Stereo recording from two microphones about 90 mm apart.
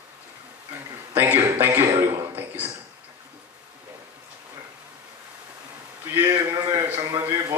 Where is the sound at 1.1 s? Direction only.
25° right (ahead or behind).